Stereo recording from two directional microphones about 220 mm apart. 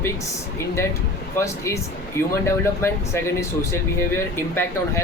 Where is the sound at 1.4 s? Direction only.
15° left (ahead or behind).